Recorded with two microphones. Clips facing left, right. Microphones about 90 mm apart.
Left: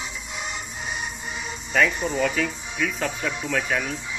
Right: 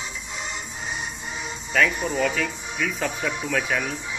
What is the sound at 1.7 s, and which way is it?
Speech, centre (ahead or behind).